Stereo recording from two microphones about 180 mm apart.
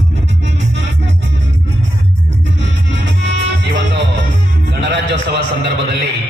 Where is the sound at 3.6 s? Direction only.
80° right.